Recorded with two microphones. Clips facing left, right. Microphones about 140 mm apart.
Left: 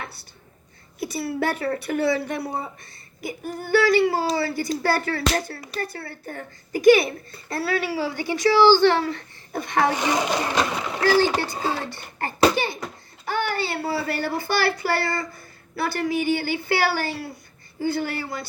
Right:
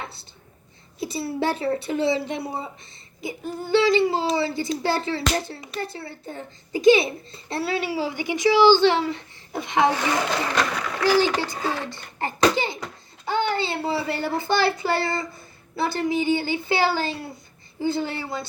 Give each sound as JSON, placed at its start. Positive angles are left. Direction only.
{"t": 0.0, "sound": "a sound", "side_deg": -25}
{"t": 0.9, "sound": "a child's voice", "side_deg": -25}
{"t": 9.9, "sound": "speech", "side_deg": 20}
{"t": 12.2, "sound": "a child's voice", "side_deg": -20}
{"t": 12.5, "sound": "a sound", "side_deg": -20}
{"t": 13.2, "sound": "a child's voice", "side_deg": -20}